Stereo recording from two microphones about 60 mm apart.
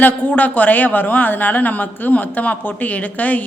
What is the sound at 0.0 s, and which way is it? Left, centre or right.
Speech, left.